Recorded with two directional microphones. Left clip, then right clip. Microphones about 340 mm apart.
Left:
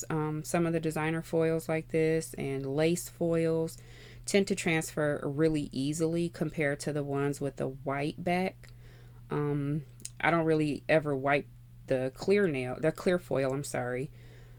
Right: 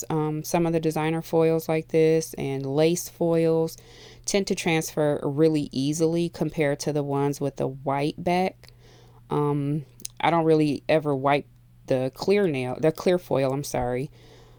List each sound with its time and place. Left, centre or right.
0.0 s speech: right